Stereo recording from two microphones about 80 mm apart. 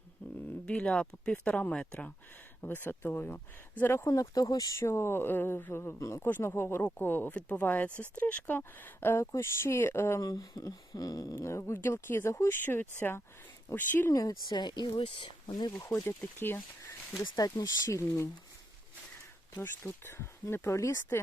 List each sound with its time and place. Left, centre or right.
0.6 s speech: centre
4.1 s speech: left
6.2 s speech: left
10.2 s speech: left
11.3 s speech: left
14.1 s speech: left
14.6 s speech: left
16.0 s speech: left
17.3 s speech: left
19.5 s speech: left